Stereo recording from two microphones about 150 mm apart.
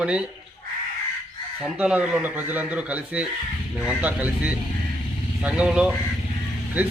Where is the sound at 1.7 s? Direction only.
10° right (ahead or behind).